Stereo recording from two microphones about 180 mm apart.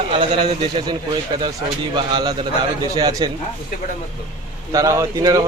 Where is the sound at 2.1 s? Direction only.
25° right (ahead or behind).